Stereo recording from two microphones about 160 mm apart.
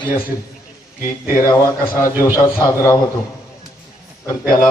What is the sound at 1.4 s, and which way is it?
A man's voice, 20° left (ahead or behind).